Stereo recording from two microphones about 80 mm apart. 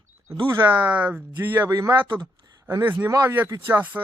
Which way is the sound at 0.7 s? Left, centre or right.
Centre.